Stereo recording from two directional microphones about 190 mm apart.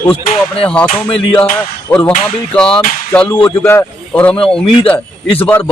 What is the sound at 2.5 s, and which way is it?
Speech, 5° left (ahead or behind).